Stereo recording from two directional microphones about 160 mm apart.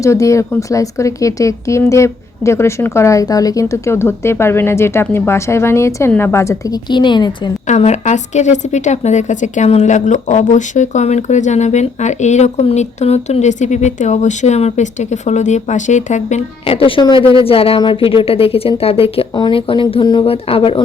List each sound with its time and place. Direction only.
0.0 s speech: 20° left (ahead or behind)
7.7 s a woman's voice: 45° left (ahead or behind)